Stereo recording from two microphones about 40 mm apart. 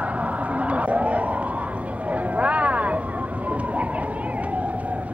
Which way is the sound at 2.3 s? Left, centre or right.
Right.